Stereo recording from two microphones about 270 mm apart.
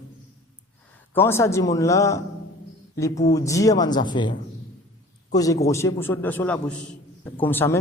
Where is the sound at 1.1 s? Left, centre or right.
Centre.